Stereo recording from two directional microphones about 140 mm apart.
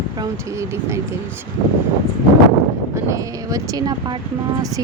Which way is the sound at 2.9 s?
25° right (ahead or behind).